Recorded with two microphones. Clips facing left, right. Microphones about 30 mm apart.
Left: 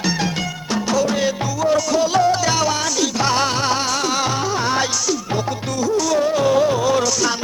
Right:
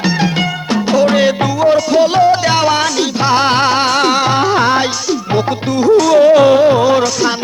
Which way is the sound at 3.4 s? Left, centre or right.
Right.